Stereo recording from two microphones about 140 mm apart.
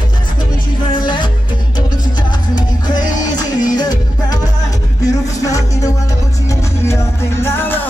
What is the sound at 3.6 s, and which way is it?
Music, 30° left (ahead or behind).